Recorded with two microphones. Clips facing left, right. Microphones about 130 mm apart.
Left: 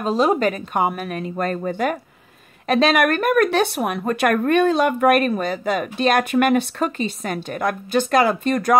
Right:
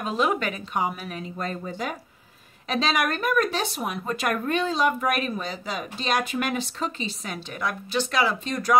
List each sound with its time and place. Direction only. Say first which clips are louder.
0.0 s speech: left 7 dB; 35° left (ahead or behind); by 8.7 s 55° left (ahead or behind)